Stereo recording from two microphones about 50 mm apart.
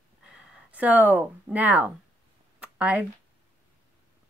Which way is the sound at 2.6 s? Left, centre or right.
Right.